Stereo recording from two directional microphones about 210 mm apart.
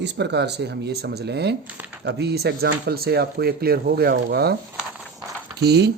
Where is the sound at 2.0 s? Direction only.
50° right (ahead or behind).